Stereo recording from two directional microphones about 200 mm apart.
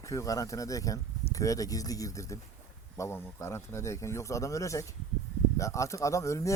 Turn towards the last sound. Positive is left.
turn(degrees=15)  # may be behind; listen again after turning